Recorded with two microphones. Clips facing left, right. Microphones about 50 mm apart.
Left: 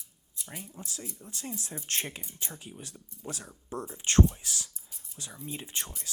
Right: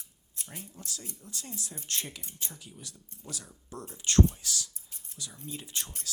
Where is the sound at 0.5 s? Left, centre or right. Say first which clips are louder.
Left 2 dB; left.